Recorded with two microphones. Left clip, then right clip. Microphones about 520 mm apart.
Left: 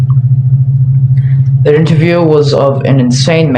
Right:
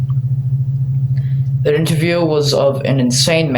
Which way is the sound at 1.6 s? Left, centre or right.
Right.